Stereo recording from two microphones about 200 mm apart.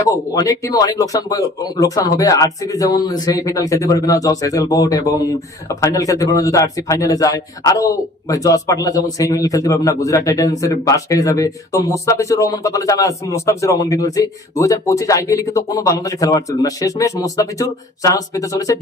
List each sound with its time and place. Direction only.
0.3 s a man's voice: 20° left (ahead or behind)